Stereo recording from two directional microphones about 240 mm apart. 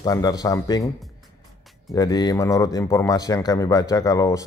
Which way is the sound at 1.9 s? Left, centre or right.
Centre.